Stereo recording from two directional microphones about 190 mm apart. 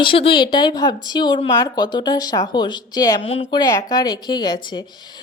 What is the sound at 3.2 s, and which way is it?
Speech, 30° left (ahead or behind).